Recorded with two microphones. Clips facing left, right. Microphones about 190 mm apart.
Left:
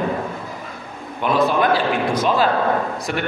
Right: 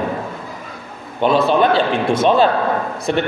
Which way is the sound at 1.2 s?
25° right (ahead or behind).